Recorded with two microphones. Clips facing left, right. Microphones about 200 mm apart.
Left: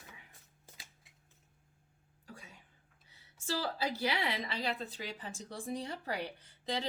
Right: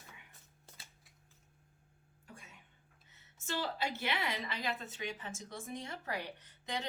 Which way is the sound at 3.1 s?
30° left (ahead or behind).